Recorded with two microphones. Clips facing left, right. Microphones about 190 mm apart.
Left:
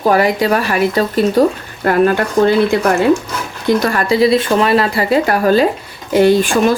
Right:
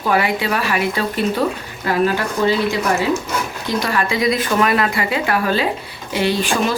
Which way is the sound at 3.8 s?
45° left (ahead or behind).